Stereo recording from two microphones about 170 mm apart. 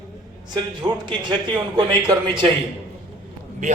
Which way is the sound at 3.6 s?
45° right (ahead or behind).